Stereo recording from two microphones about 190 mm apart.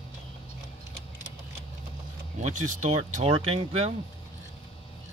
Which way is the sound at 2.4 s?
40° right (ahead or behind).